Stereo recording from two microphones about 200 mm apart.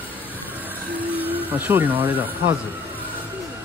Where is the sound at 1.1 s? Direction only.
10° right (ahead or behind).